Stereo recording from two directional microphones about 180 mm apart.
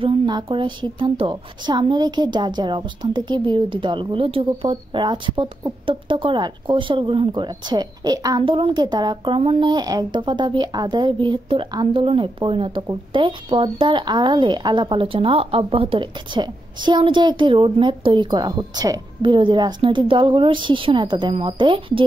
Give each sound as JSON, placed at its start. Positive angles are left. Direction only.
{"t": 0.0, "sound": "a woman's voice", "side_deg": -30}